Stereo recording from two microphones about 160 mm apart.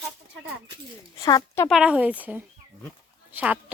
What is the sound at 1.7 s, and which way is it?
Speech, 5° right (ahead or behind).